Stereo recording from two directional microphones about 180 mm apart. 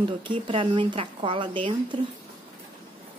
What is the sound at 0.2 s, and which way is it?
Speech, 30° right (ahead or behind).